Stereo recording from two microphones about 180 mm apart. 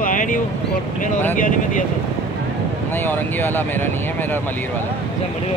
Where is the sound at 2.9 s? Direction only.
10° left (ahead or behind).